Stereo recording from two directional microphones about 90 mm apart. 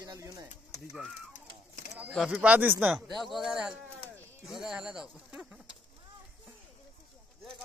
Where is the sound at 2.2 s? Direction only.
10° right (ahead or behind).